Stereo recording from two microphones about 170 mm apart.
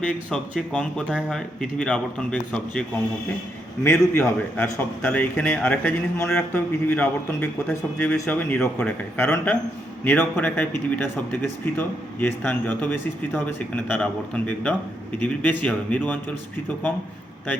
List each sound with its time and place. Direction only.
0.0 s speech: 5° left (ahead or behind)
3.8 s a man's voice: 15° left (ahead or behind)